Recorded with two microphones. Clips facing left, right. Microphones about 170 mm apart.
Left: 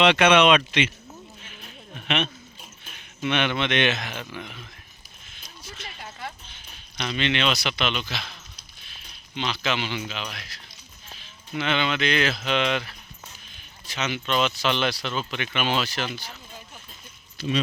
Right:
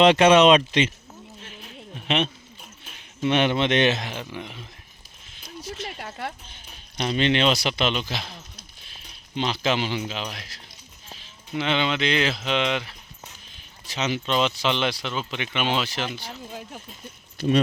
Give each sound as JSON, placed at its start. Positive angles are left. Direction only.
{"t": 0.1, "sound": "a man's voice", "side_deg": -40}
{"t": 1.9, "sound": "a man's voice", "side_deg": -30}
{"t": 5.6, "sound": "a sound", "side_deg": -40}
{"t": 6.0, "sound": "speech", "side_deg": -65}
{"t": 7.0, "sound": "a man's voice", "side_deg": -40}
{"t": 8.9, "sound": "a sound", "side_deg": -40}
{"t": 10.0, "sound": "a man's voice", "side_deg": -30}
{"t": 13.9, "sound": "a man's voice", "side_deg": -35}
{"t": 14.3, "sound": "speech", "side_deg": -25}